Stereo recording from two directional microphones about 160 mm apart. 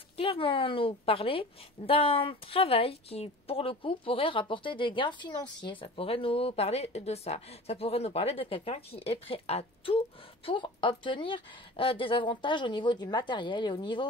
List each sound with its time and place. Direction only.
0.2 s a woman's voice: 35° left (ahead or behind)